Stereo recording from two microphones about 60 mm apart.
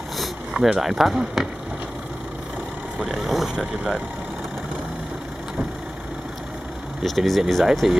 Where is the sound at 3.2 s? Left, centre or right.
Centre.